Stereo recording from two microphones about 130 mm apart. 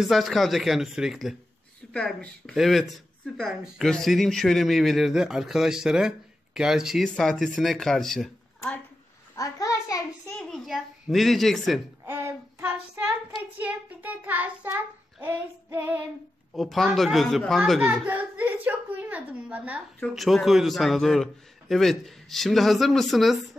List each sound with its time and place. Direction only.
0.1 s speech: centre (ahead or behind)
9.3 s a sound: 25° left (ahead or behind)
10.4 s speech: centre (ahead or behind)
12.1 s child singing: 20° right (ahead or behind)
16.5 s speech: centre (ahead or behind)
17.6 s child singing: 10° right (ahead or behind)
20.2 s speech: centre (ahead or behind)